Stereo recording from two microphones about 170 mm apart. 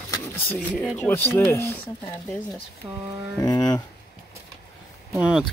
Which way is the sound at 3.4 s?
25° left (ahead or behind).